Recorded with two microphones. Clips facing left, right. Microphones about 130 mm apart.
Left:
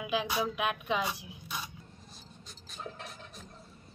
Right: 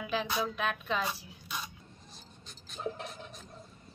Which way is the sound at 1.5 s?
5° left (ahead or behind).